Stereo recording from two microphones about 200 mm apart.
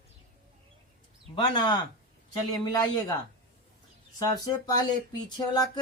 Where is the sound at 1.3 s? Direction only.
20° left (ahead or behind).